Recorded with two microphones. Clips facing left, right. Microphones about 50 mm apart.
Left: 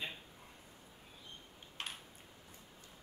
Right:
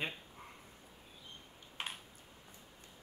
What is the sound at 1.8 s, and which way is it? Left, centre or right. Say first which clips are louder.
Coin: right 2 dB; centre.